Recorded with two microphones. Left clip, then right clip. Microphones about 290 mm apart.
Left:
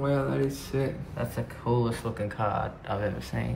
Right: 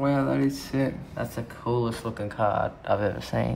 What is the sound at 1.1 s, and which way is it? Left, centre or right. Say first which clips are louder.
Speech: right 1 dB; centre.